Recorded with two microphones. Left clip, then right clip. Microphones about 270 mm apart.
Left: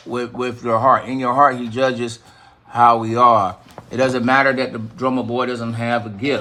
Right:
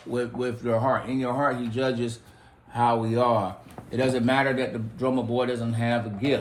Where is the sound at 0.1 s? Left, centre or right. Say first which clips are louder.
Left 5 dB; left.